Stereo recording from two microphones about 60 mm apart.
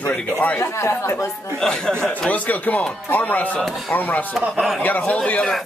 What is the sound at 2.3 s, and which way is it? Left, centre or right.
Speech, left.